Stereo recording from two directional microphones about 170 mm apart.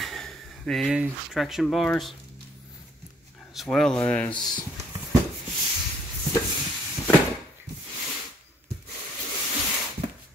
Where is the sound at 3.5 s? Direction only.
Centre (ahead or behind).